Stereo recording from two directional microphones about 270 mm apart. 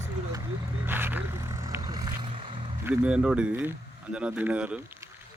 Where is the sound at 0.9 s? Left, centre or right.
Centre.